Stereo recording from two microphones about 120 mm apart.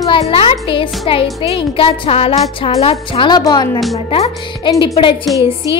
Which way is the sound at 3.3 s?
35° left (ahead or behind).